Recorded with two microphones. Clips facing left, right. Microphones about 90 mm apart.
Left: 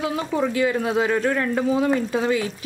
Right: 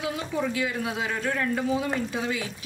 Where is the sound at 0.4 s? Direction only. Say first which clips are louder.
Left 7 dB; 50° left (ahead or behind).